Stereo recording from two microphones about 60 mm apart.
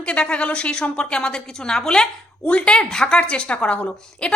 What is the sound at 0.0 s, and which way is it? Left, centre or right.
A woman's voice, centre.